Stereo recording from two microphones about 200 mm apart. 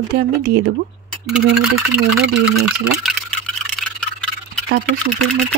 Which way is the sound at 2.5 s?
50° right (ahead or behind).